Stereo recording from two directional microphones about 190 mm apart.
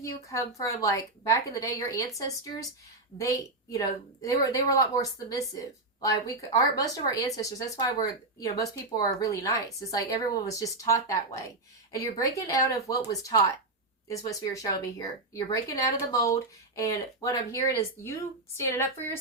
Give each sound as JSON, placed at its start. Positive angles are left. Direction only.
{"t": 0.0, "sound": "a woman's voice", "side_deg": 15}
{"t": 8.4, "sound": "a woman's voice", "side_deg": 20}
{"t": 14.3, "sound": "a woman's voice", "side_deg": 15}